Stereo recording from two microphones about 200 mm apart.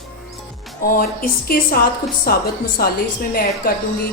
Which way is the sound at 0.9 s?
45° left (ahead or behind).